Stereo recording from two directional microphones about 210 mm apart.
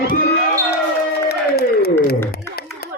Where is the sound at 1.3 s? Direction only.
50° left (ahead or behind).